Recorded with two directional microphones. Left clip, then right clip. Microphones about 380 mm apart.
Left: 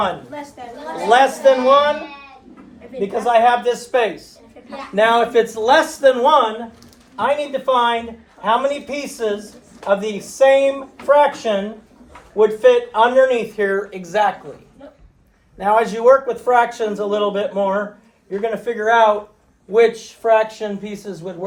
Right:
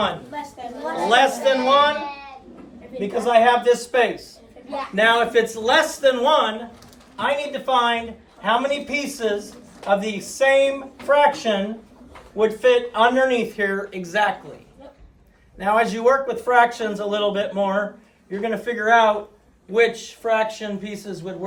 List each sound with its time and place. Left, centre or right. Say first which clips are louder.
1.1 s a man's voice: left 5 dB; centre
3.0 s a man's voice: left 2 dB; centre
15.5 s a man's voice: left 3 dB; centre